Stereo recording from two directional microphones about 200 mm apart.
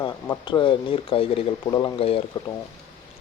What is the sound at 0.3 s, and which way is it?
Speech, 20° left (ahead or behind).